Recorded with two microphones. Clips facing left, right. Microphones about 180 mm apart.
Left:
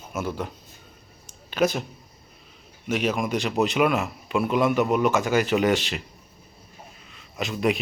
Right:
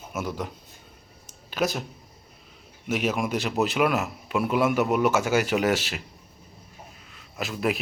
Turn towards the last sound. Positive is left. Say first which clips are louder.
# left 3 dB
turn(degrees=-5)  # may be behind; listen again after turning